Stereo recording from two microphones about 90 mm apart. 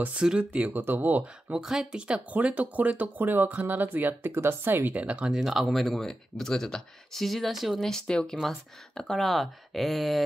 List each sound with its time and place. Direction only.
0.0 s speech: 10° right (ahead or behind)
1.6 s speech: 5° right (ahead or behind)